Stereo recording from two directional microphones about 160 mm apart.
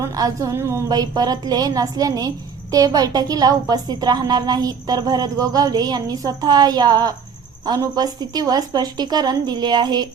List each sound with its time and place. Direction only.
0.0 s a woman's voice: 20° right (ahead or behind)